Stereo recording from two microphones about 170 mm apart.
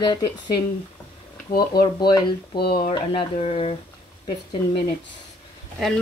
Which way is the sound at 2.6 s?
70° left (ahead or behind).